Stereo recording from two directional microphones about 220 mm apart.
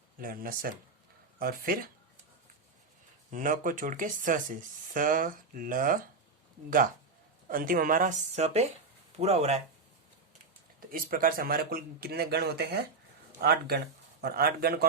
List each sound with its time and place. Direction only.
0.2 s speech: 40° right (ahead or behind)
3.3 s speech: 35° right (ahead or behind)
7.4 s speech: 40° right (ahead or behind)
10.8 s speech: 40° right (ahead or behind)